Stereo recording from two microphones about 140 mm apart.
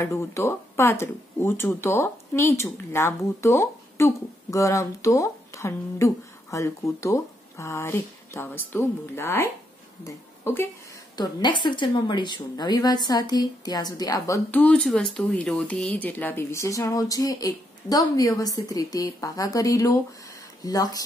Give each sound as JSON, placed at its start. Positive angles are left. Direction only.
{"t": 0.0, "sound": "speech", "side_deg": 20}
{"t": 11.1, "sound": "speech", "side_deg": 30}
{"t": 14.6, "sound": "speech", "side_deg": 5}